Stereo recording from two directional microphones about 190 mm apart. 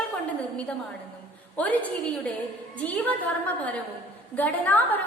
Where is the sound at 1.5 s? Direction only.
5° left (ahead or behind).